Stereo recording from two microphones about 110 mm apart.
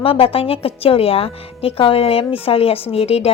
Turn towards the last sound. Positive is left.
turn(degrees=65)  # may be behind; listen again after turning